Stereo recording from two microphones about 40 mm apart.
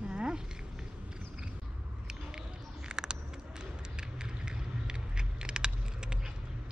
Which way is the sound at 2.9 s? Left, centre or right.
Right.